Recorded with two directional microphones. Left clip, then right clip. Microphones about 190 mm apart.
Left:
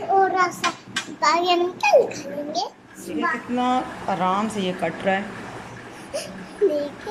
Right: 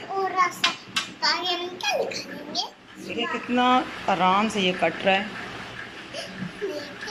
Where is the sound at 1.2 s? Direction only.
50° left (ahead or behind).